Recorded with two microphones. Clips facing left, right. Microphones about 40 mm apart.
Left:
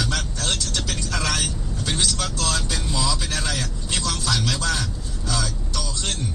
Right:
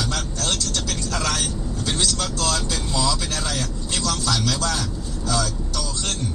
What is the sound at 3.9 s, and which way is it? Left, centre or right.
Speech, left.